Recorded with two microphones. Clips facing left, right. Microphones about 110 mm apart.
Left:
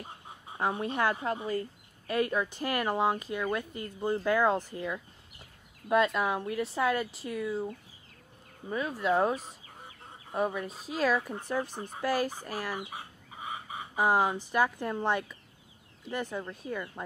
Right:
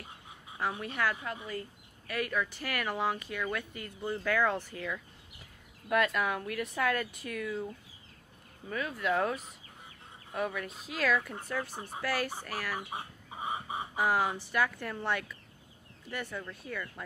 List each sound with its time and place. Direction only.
0.0 s duck: 25° left (ahead or behind)
1.1 s speech: 35° left (ahead or behind)
11.2 s speech: 15° left (ahead or behind)
12.9 s chicken: 25° right (ahead or behind)
13.9 s speech: 20° left (ahead or behind)